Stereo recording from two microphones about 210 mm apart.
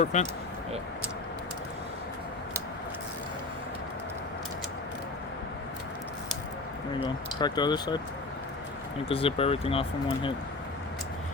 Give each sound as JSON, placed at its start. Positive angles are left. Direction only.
{"t": 0.0, "sound": "speech", "side_deg": 35}
{"t": 7.0, "sound": "speech", "side_deg": 20}
{"t": 9.0, "sound": "speech", "side_deg": 25}